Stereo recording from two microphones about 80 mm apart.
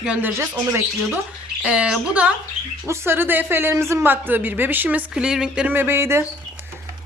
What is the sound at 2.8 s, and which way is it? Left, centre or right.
Speech, right.